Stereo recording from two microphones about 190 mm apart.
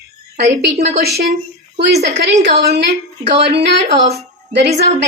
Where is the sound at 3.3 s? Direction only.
30° right (ahead or behind).